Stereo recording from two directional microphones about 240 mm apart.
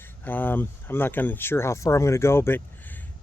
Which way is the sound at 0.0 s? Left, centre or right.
Centre.